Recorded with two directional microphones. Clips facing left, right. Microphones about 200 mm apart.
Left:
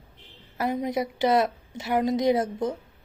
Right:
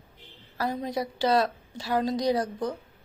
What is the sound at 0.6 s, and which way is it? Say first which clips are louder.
Speech: left 3 dB; 20° left (ahead or behind).